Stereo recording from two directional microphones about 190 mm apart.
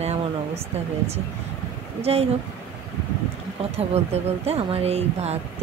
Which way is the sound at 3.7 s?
35° right (ahead or behind).